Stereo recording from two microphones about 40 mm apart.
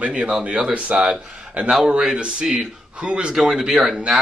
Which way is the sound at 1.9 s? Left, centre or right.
Centre.